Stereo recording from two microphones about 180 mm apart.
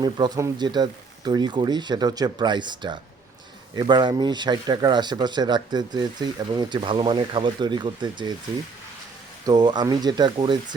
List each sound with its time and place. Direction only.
0.0 s speech: 25° right (ahead or behind)
9.5 s speech: 25° right (ahead or behind)